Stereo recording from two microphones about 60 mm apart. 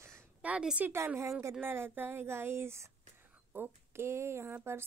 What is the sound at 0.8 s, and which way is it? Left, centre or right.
A woman's voice, right.